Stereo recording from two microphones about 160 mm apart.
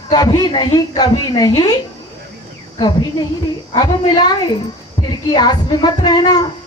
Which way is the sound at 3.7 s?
30° left (ahead or behind).